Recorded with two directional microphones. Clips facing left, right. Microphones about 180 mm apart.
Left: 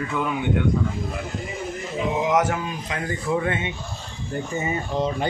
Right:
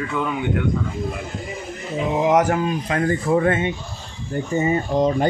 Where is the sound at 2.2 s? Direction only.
35° right (ahead or behind).